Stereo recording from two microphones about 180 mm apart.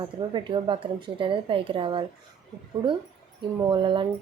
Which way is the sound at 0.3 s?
25° right (ahead or behind).